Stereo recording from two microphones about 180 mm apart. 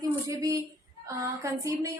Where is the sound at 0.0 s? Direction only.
20° right (ahead or behind).